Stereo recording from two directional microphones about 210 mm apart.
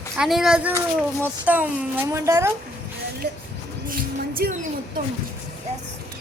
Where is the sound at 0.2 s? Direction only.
Centre (ahead or behind).